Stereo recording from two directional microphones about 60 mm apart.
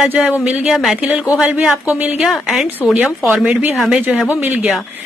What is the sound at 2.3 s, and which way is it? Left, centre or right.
Speech, centre.